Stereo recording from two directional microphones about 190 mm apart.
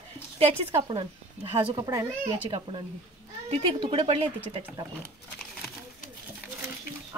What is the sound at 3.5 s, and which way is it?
Speech, 30° right (ahead or behind).